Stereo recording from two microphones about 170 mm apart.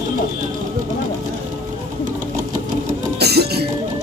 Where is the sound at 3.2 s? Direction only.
70° right (ahead or behind).